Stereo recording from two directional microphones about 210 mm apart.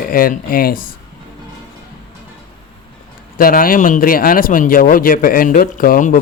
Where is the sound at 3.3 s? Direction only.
40° left (ahead or behind).